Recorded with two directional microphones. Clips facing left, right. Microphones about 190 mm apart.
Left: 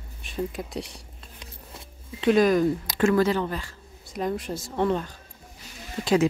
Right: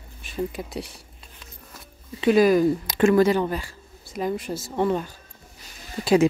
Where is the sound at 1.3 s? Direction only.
25° left (ahead or behind).